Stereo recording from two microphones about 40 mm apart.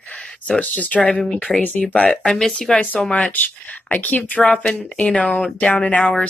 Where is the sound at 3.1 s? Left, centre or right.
Left.